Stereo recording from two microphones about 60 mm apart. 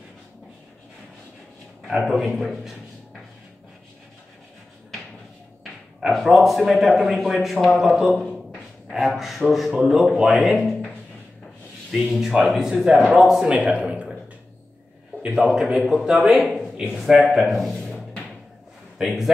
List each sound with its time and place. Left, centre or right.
1.9 s a man's voice: centre
5.6 s a man's voice: centre
11.9 s speech: centre
15.2 s a man's voice: centre
16.6 s a sound: centre
16.9 s a man's voice: centre
18.9 s a man's voice: centre